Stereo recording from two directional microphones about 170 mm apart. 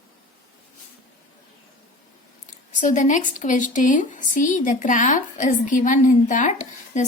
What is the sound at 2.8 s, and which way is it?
Speech, 45° left (ahead or behind).